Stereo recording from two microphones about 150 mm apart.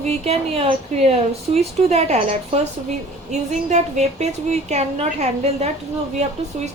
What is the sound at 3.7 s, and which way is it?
A woman's voice, 50° right (ahead or behind).